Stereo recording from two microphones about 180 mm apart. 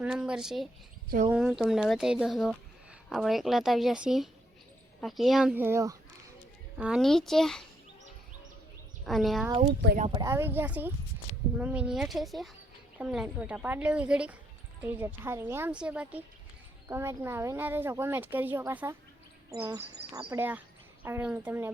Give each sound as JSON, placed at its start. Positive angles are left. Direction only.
{"t": 0.0, "sound": "speech", "side_deg": -5}
{"t": 6.7, "sound": "speech", "side_deg": -5}
{"t": 9.0, "sound": "speech", "side_deg": 0}
{"t": 10.1, "sound": "speech", "side_deg": -20}
{"t": 20.4, "sound": "speech", "side_deg": -10}